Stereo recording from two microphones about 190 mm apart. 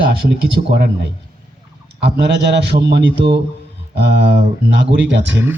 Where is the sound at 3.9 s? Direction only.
60° right (ahead or behind).